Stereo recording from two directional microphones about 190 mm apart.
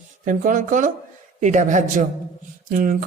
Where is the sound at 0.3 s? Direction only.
45° right (ahead or behind).